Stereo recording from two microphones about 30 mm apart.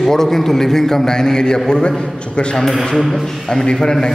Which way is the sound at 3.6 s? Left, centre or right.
Left.